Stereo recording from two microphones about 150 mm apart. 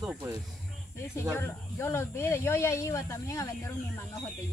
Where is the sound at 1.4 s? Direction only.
15° left (ahead or behind).